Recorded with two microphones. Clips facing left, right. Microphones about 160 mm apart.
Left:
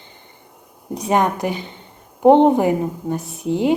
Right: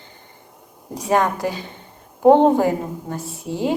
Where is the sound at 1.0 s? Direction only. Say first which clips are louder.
Left 1 dB; 20° left (ahead or behind).